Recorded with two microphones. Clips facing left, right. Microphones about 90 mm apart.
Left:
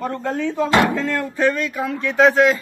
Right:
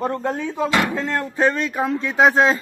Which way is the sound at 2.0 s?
20° right (ahead or behind).